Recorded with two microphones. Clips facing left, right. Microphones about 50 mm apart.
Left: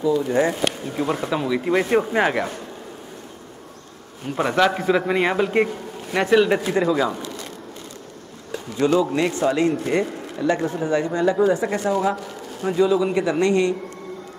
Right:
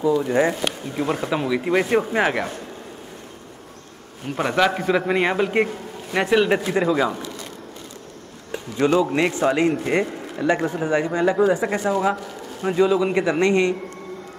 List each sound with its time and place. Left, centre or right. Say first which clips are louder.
0.0 s speech: right 1 dB; centre
4.4 s a man's voice: left 1 dB; centre
8.7 s speech: even; centre